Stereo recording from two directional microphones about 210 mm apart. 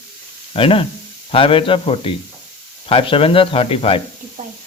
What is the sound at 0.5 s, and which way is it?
A man's voice, 25° left (ahead or behind).